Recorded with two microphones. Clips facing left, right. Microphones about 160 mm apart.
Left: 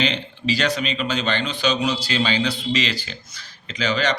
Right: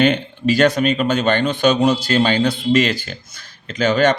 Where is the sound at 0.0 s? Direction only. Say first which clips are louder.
Right 8 dB; 50° right (ahead or behind).